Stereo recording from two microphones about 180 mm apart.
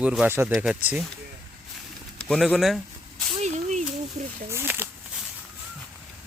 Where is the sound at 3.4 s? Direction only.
40° right (ahead or behind).